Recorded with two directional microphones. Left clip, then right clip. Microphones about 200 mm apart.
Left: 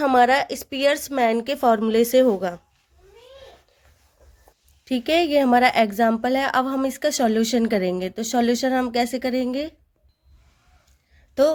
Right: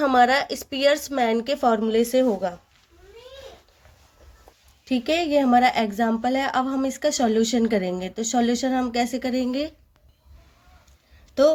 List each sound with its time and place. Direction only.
0.0 s a woman's voice: 15° left (ahead or behind); by 2.6 s 35° left (ahead or behind)
4.9 s a woman's voice: 20° left (ahead or behind)
11.4 s a woman's voice: 20° left (ahead or behind)